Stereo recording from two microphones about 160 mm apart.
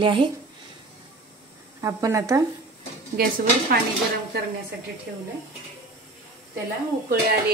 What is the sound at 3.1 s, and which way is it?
Speech, 70° right (ahead or behind).